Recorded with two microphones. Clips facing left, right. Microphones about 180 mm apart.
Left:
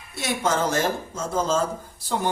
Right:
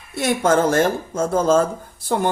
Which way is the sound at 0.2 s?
50° right (ahead or behind).